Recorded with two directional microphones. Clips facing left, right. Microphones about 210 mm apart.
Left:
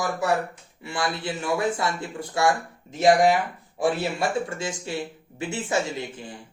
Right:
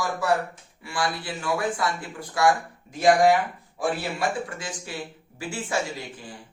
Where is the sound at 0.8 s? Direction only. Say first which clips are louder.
Left 1 dB; 25° left (ahead or behind).